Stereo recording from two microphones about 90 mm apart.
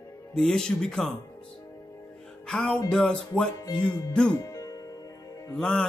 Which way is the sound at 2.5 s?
10° left (ahead or behind).